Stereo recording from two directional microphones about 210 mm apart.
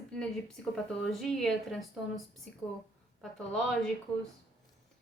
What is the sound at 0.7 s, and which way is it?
Speech, centre (ahead or behind).